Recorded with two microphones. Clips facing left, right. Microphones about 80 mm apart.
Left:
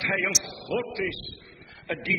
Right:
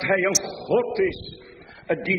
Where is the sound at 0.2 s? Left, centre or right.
Right.